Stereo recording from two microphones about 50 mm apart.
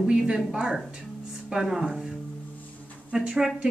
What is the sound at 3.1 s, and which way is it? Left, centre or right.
Speech, right.